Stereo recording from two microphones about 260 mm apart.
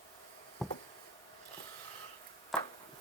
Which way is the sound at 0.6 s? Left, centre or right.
Centre.